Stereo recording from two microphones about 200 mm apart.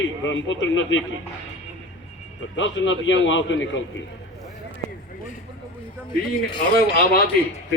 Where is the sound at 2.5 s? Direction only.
70° left (ahead or behind).